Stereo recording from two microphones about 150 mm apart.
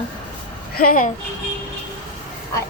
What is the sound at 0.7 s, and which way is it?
Speech, 70° left (ahead or behind).